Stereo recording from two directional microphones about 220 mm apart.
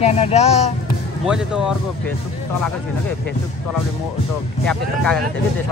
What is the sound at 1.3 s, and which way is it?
Speech, 5° right (ahead or behind).